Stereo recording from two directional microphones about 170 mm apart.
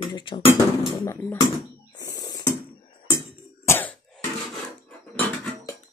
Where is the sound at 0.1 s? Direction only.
30° left (ahead or behind).